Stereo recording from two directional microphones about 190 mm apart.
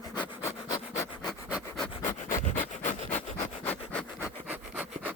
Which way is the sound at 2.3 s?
40° left (ahead or behind).